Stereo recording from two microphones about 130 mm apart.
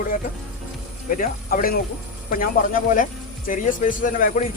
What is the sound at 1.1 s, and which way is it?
Speech, 90° left.